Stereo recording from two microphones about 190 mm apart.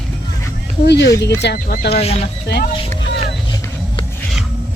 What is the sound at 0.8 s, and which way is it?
Speech, 65° left (ahead or behind).